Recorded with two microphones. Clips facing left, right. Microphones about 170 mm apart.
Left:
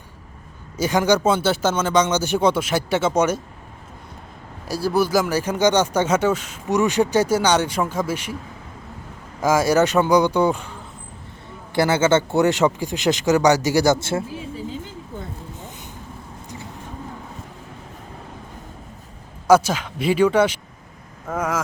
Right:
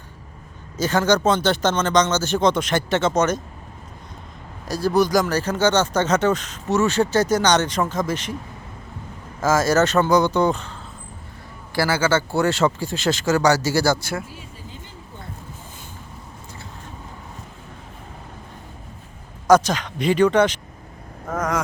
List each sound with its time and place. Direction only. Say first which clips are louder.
0.8 s speech: left 1 dB; 10° left (ahead or behind)
4.7 s speech: right 1 dB; 10° left (ahead or behind)
9.4 s speech: left 1 dB; 10° left (ahead or behind)
11.7 s speech: left 3 dB; 25° left (ahead or behind)
19.5 s speech: even; 10° left (ahead or behind)
21.2 s vehicle: even; 10° left (ahead or behind)